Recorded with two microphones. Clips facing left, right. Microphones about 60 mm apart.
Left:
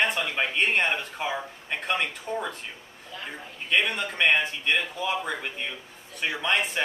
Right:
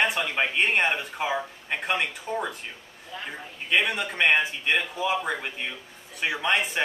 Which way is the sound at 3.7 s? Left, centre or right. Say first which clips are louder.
Right 1 dB; centre.